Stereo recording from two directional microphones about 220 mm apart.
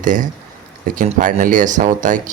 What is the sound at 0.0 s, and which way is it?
Speech, 35° right (ahead or behind).